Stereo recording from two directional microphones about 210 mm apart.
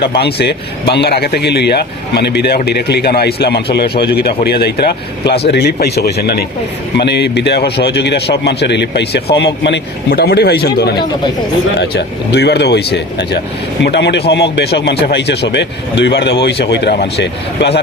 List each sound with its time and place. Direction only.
0.2 s speech: 50° left (ahead or behind)